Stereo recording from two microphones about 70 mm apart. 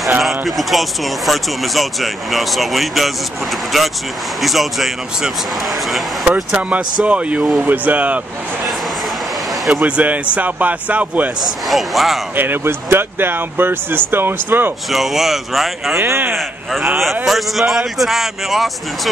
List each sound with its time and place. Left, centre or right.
0.5 s speech: centre
6.2 s speech: centre
9.7 s speech: centre
11.6 s speech: centre
12.4 s speech: right
14.9 s speech: centre
16.0 s speech: right
17.0 s speech: centre